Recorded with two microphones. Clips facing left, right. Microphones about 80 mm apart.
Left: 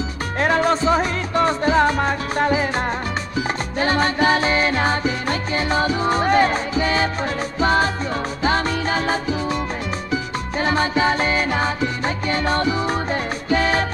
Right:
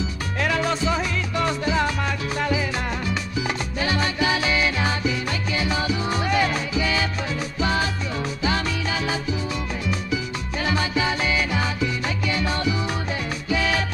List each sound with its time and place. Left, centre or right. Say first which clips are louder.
0.4 s music: left 5 dB; left